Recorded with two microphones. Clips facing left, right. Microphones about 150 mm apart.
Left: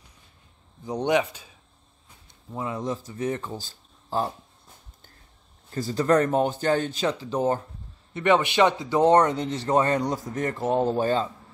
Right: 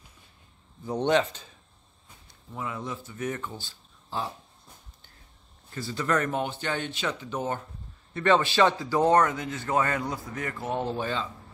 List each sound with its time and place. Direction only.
0.8 s speech: 15° left (ahead or behind)
2.5 s a man's voice: 35° left (ahead or behind)
5.8 s a man's voice: 40° left (ahead or behind)
8.1 s a man's voice: 20° left (ahead or behind); by 11.2 s 40° left (ahead or behind)